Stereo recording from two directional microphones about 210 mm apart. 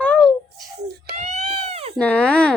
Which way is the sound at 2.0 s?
5° left (ahead or behind).